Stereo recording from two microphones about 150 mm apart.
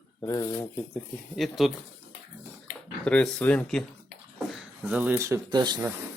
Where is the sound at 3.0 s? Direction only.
5° left (ahead or behind).